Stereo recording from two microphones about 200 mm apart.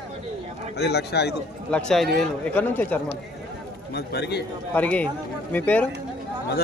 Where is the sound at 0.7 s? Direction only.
55° left (ahead or behind).